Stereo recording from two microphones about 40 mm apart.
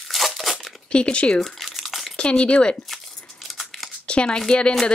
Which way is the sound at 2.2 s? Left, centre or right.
Left.